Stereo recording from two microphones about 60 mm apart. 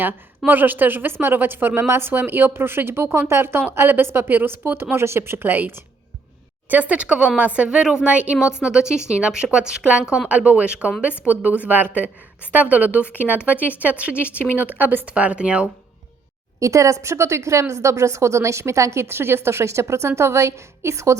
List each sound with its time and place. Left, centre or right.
0.0 s speech: right
6.7 s a woman's voice: right
16.6 s speech: right